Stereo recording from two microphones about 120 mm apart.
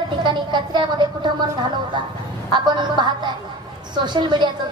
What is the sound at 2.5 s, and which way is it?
A woman's voice, 40° right (ahead or behind).